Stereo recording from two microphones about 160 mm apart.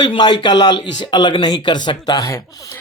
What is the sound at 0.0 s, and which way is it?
A man's voice, 30° left (ahead or behind).